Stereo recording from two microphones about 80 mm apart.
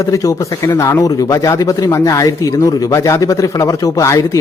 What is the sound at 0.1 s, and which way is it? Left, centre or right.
A man's voice, left.